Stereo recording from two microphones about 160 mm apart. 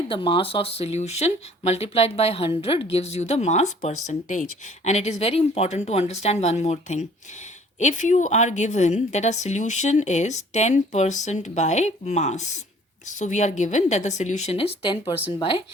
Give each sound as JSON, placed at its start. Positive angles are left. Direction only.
{"t": 0.1, "sound": "a woman's voice", "side_deg": 35}